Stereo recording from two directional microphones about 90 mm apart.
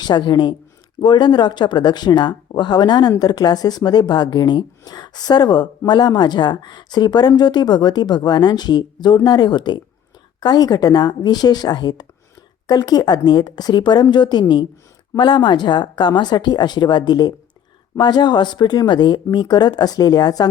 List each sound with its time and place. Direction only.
0.0 s speech: 55° left (ahead or behind)